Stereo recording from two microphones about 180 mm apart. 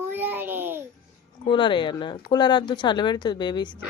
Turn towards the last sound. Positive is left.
turn(degrees=25)  # may be behind; listen again after turning